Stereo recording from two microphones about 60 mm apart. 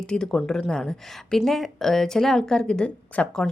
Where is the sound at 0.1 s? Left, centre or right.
Centre.